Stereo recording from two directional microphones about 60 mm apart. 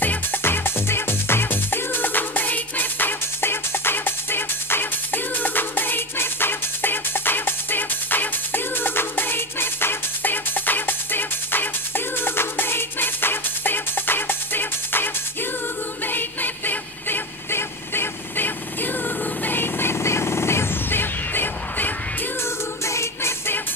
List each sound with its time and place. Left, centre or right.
0.0 s music: left
16.1 s vehicle: left
19.4 s a sound: left
22.8 s music: left